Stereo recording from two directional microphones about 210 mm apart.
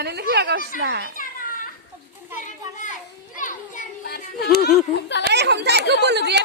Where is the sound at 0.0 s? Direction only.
50° right (ahead or behind).